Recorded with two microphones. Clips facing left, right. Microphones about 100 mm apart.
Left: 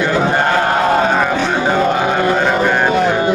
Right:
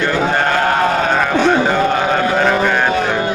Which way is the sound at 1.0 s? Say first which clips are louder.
Right 1 dB; 10° left (ahead or behind).